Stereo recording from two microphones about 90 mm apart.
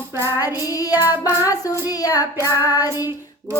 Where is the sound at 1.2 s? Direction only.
40° left (ahead or behind).